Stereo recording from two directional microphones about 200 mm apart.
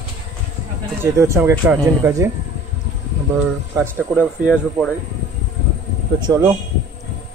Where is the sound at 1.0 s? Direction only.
15° right (ahead or behind).